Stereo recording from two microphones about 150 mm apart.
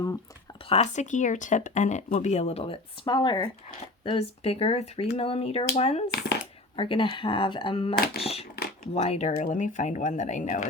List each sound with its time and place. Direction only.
0.7 s speech: 50° left (ahead or behind)
6.1 s shuffling cards: 90° left
6.7 s speech: 35° left (ahead or behind)
7.9 s speech: 90° left
8.2 s speech: 40° left (ahead or behind); by 10.7 s 60° left (ahead or behind)